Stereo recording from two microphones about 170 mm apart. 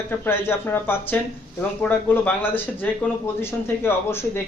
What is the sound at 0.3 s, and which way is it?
Speech, 15° left (ahead or behind).